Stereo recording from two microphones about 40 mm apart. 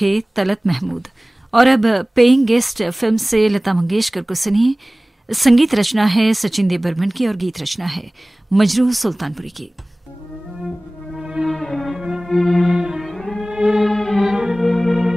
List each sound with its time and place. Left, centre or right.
0.0 s speech: centre
11.4 s music: centre
12.0 s music: centre
12.3 s speech: centre
12.6 s cello: centre
13.0 s cello: centre
13.5 s music: centre
13.7 s music: centre
14.2 s music: centre
14.6 s organ: centre